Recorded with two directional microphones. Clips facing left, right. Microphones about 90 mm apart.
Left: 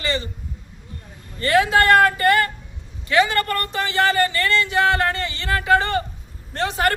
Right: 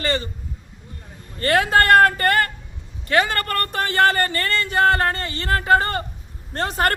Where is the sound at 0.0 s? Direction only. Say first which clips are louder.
Right 1 dB; 45° right (ahead or behind).